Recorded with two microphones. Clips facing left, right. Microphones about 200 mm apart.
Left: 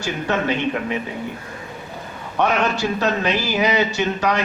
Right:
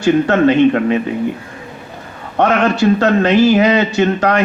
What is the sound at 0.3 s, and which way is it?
Speech, 60° right (ahead or behind).